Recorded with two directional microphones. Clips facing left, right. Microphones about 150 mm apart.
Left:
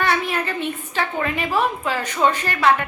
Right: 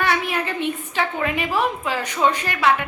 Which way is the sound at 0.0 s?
10° right (ahead or behind).